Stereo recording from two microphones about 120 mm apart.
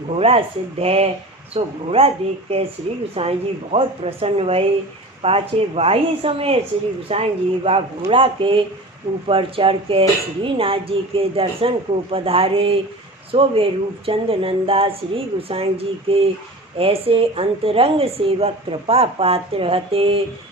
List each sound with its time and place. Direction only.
0.1 s a woman's voice: 55° right (ahead or behind)